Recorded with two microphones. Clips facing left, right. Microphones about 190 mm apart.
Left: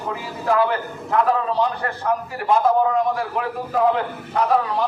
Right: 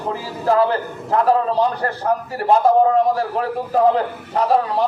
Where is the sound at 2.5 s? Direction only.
35° right (ahead or behind).